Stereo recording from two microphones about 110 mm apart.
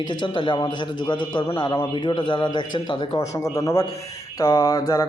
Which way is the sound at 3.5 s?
30° left (ahead or behind).